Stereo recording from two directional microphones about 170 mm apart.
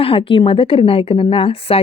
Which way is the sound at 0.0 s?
35° left (ahead or behind).